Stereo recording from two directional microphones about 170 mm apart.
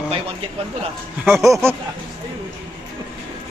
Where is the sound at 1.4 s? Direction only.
20° right (ahead or behind).